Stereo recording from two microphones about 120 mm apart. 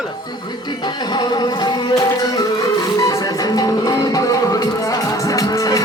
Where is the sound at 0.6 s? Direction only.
40° left (ahead or behind).